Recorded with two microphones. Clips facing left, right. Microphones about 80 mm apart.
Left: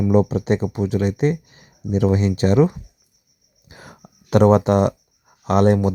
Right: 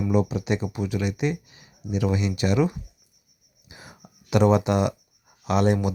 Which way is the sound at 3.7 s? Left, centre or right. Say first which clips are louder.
Left 4 dB; left.